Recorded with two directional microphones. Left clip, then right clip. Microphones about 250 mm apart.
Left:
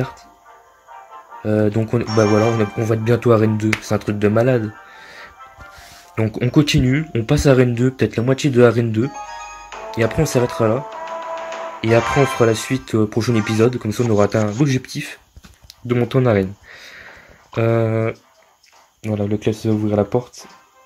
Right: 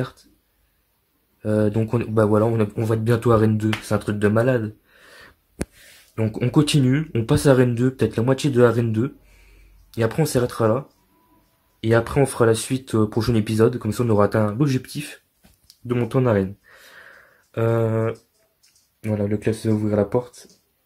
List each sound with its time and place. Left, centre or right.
1.4 s speech: centre
6.1 s speech: centre
11.8 s speech: centre
17.6 s speech: centre